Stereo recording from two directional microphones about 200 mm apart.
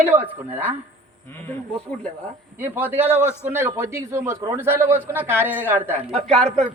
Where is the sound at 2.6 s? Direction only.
10° right (ahead or behind).